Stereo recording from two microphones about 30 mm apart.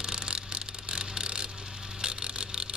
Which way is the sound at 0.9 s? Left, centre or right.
Right.